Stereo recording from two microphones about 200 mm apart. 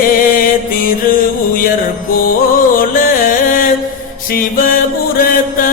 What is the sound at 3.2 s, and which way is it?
Music, 45° left (ahead or behind).